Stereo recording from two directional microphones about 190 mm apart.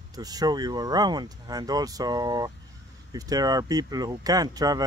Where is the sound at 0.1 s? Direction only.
20° right (ahead or behind).